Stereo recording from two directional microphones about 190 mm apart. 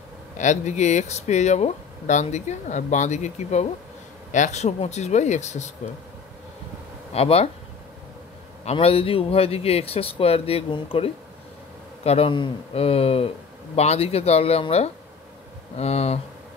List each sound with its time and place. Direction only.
0.4 s speech: 40° left (ahead or behind)
7.2 s speech: 30° left (ahead or behind)
8.6 s speech: 30° left (ahead or behind)